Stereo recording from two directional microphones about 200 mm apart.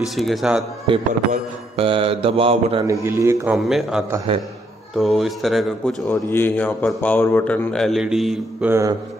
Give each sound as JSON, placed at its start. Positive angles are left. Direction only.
{"t": 0.1, "sound": "a man's voice", "side_deg": 0}
{"t": 0.8, "sound": "mantra", "side_deg": -30}
{"t": 2.9, "sound": "a man's voice", "side_deg": -15}
{"t": 3.5, "sound": "a man's voice", "side_deg": 0}
{"t": 6.0, "sound": "speech", "side_deg": 10}